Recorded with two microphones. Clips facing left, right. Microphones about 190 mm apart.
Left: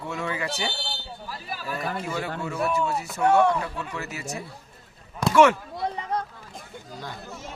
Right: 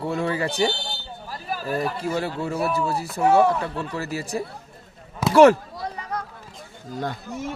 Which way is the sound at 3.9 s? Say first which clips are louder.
Right 6 dB; 35° right (ahead or behind).